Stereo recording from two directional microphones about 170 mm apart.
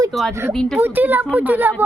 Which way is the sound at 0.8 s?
10° right (ahead or behind).